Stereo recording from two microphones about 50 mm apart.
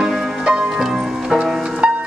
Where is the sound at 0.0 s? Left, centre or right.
Centre.